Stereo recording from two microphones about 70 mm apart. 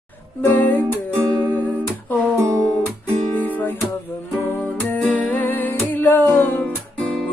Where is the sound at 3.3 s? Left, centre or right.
Left.